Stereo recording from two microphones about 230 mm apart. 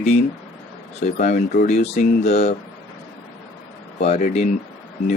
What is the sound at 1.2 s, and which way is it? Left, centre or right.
Speech, left.